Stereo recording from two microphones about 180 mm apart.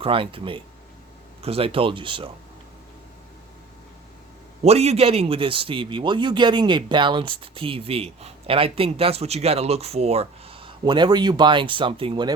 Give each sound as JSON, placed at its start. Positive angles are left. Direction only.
{"t": 0.0, "sound": "a man's voice", "side_deg": -30}
{"t": 4.6, "sound": "a man's voice", "side_deg": -35}